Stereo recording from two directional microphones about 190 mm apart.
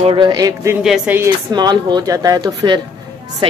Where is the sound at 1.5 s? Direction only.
20° right (ahead or behind).